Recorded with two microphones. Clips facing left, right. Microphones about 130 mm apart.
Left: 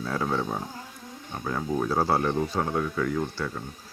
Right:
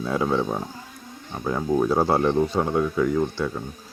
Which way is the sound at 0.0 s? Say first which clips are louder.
Right 5 dB; 15° right (ahead or behind).